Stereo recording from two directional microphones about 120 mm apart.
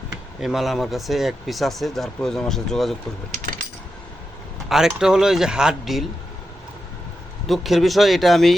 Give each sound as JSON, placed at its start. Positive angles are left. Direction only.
{"t": 0.4, "sound": "speech", "side_deg": 0}
{"t": 4.7, "sound": "speech", "side_deg": -5}
{"t": 7.4, "sound": "speech", "side_deg": 0}